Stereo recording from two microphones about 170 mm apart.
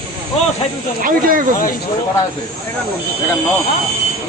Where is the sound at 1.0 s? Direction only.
55° right (ahead or behind).